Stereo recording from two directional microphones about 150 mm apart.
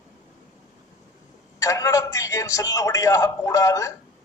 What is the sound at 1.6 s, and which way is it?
A man's voice, 20° left (ahead or behind).